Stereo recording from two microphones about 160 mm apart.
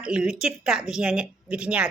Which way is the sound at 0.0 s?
5° right (ahead or behind).